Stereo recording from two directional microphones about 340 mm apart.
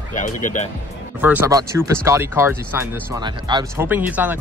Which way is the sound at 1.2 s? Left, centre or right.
Centre.